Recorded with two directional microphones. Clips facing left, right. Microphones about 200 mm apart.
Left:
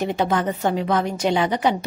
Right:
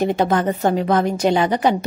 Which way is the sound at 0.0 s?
45° right (ahead or behind).